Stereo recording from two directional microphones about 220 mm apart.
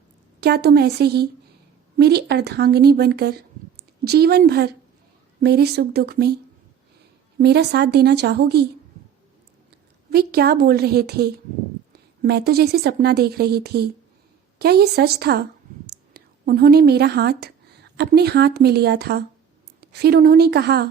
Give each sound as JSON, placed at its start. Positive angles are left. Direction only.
{"t": 0.3, "sound": "speech", "side_deg": -45}
{"t": 7.3, "sound": "speech", "side_deg": -50}
{"t": 10.1, "sound": "speech", "side_deg": -45}